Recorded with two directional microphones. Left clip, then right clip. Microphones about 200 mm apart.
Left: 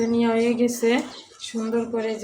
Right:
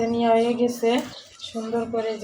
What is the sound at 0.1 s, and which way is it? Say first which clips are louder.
Speech: right 2 dB; 25° left (ahead or behind).